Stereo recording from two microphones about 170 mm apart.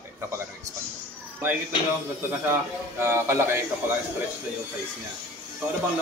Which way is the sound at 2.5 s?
15° right (ahead or behind).